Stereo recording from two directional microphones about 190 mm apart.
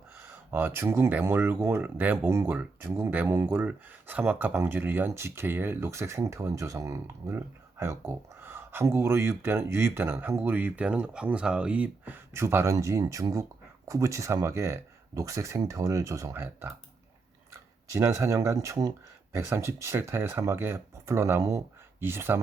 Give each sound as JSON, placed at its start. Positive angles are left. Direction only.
{"t": 0.2, "sound": "speech", "side_deg": -10}
{"t": 17.9, "sound": "speech", "side_deg": -15}